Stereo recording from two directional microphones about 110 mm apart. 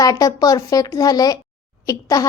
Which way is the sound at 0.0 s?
30° left (ahead or behind).